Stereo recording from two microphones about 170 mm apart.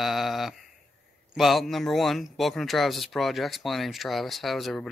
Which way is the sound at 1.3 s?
Centre (ahead or behind).